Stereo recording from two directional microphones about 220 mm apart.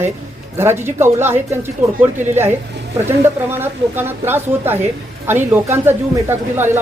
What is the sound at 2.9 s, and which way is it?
Speech, 10° right (ahead or behind).